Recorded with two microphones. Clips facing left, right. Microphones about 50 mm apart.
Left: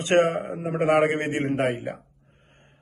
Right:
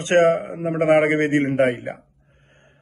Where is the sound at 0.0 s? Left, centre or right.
Right.